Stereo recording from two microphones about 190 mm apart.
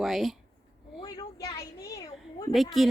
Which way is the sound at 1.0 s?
20° left (ahead or behind).